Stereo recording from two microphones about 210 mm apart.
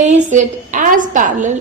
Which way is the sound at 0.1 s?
35° right (ahead or behind).